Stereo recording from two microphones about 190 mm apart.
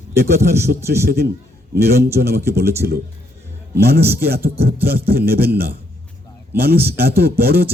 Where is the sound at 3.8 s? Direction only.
55° right (ahead or behind).